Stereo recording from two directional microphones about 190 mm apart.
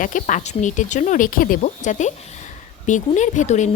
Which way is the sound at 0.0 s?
40° left (ahead or behind).